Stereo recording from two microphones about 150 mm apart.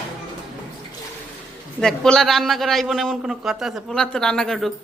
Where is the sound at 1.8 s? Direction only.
5° left (ahead or behind).